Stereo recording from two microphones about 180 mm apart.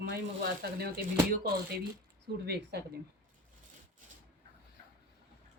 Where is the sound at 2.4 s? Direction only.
65° right (ahead or behind).